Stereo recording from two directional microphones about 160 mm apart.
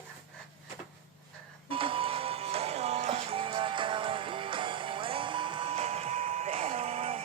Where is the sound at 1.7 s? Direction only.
35° right (ahead or behind).